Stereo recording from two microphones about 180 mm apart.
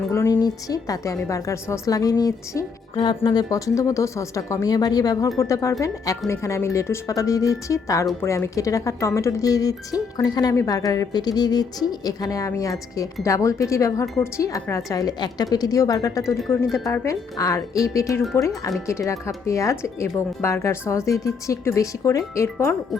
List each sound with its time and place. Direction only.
0.1 s a woman's voice: 20° left (ahead or behind)